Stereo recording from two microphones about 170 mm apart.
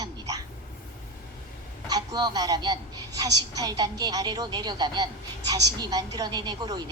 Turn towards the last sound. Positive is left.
turn(degrees=-25)  # may be behind; listen again after turning